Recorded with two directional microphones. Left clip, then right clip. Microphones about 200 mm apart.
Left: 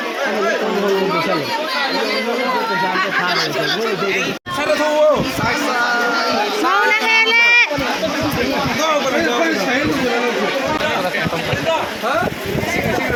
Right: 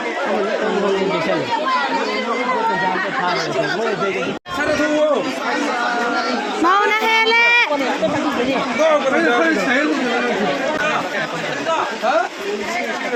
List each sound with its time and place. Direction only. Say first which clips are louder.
6.9 s child singing: left 1 dB; 20° right (ahead or behind)